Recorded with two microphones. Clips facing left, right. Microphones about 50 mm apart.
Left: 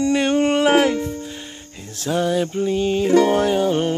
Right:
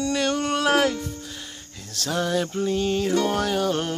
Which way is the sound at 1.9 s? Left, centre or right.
Centre.